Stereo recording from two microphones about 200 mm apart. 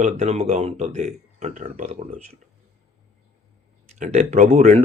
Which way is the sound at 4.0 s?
35° right (ahead or behind).